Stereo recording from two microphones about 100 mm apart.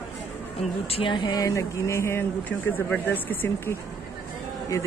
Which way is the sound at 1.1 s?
50° left (ahead or behind).